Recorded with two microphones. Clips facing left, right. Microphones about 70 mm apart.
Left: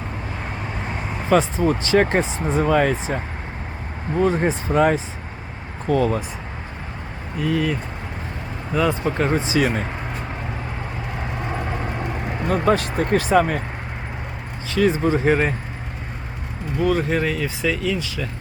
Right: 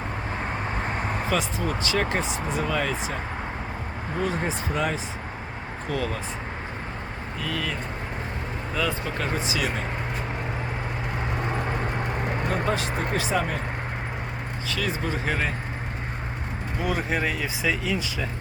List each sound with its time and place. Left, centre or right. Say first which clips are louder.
1.3 s speech: left 12 dB; left
4.2 s speech: left 8 dB; left
5.9 s speech: left 10 dB; left
7.4 s speech: left 9 dB; centre; by 9.7 s left
12.6 s speech: left 7 dB; left
14.8 s speech: left 11 dB; left
16.8 s speech: left 6 dB; centre